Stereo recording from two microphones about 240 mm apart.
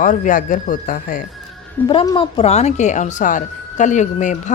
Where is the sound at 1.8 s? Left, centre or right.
Centre.